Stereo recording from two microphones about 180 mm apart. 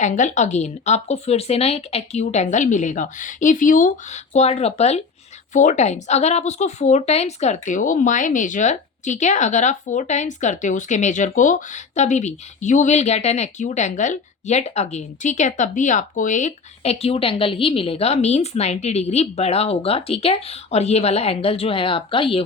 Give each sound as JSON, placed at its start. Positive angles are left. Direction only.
{"t": 0.0, "sound": "speech", "side_deg": 45}